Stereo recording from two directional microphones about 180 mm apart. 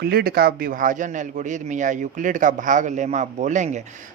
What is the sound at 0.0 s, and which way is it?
A man's voice, 60° right (ahead or behind).